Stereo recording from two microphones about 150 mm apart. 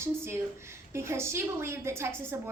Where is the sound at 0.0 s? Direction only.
15° right (ahead or behind).